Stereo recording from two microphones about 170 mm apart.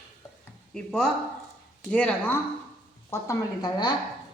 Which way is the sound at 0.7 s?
5° left (ahead or behind).